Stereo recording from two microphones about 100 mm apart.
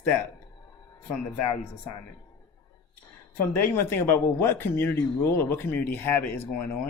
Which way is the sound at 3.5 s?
20° left (ahead or behind).